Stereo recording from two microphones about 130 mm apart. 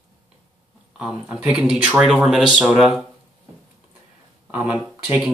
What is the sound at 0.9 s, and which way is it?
Speech, 5° right (ahead or behind).